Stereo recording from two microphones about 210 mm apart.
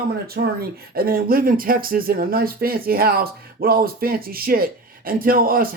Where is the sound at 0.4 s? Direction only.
45° right (ahead or behind).